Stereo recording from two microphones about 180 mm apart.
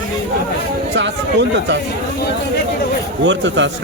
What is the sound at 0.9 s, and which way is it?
Speech, 75° right (ahead or behind).